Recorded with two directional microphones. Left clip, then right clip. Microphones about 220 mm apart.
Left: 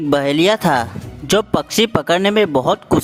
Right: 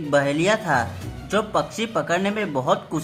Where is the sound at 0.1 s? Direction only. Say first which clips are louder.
Left 5 dB; 45° left (ahead or behind).